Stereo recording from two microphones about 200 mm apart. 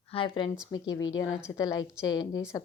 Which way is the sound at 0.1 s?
25° left (ahead or behind).